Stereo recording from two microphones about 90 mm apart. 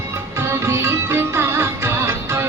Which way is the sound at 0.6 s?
30° right (ahead or behind).